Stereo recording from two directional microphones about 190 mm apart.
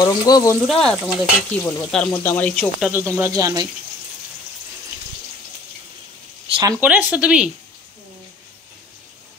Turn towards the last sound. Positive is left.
turn(degrees=-5)  # may be behind; listen again after turning